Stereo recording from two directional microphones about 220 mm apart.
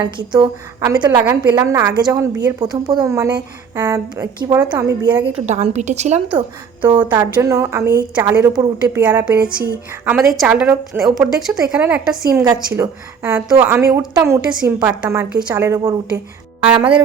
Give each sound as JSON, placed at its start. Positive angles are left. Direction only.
{"t": 0.0, "sound": "a woman's voice", "side_deg": -20}
{"t": 5.5, "sound": "a woman's voice", "side_deg": -30}
{"t": 6.8, "sound": "a woman's voice", "side_deg": -10}
{"t": 9.4, "sound": "speech", "side_deg": -45}
{"t": 10.3, "sound": "a woman's voice", "side_deg": -5}